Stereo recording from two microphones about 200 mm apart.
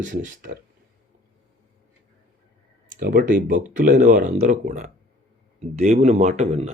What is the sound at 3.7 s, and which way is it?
A man's voice, 40° right (ahead or behind).